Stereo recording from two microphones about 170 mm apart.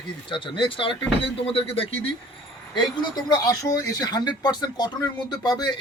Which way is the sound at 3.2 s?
20° left (ahead or behind).